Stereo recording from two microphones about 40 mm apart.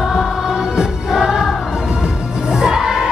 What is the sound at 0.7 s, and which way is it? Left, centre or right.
Music, centre.